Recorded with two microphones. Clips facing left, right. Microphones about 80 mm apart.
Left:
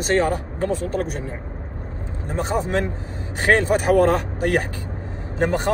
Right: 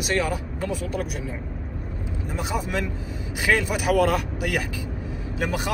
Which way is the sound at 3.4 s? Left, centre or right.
Left.